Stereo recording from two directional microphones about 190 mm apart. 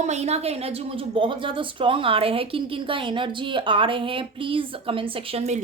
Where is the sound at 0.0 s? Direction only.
35° right (ahead or behind).